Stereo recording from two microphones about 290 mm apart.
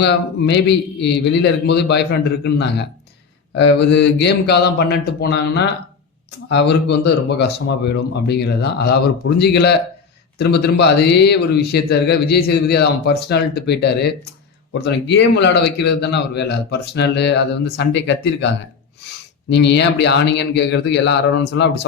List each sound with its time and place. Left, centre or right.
0.0 s a man's voice: left